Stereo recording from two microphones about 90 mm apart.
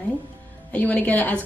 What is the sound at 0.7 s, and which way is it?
Speech, 15° left (ahead or behind).